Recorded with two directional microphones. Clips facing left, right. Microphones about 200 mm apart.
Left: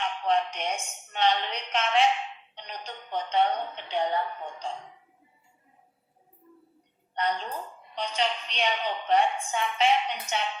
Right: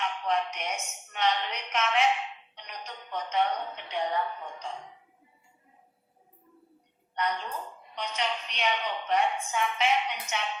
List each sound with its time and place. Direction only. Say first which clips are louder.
0.0 s a woman's voice: left 3 dB; 30° left (ahead or behind)
7.2 s a woman's voice: left 2 dB; 30° left (ahead or behind)